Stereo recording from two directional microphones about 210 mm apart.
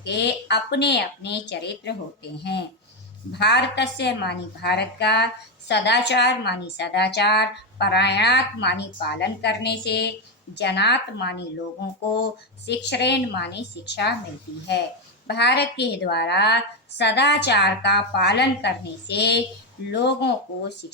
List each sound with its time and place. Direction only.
0.0 s a woman's voice: 55° left (ahead or behind)
15.3 s a woman's voice: 55° left (ahead or behind)